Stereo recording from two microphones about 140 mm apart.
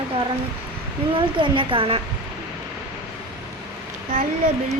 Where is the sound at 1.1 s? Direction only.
40° right (ahead or behind).